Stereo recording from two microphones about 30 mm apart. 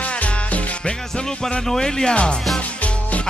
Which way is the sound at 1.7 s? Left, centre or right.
Centre.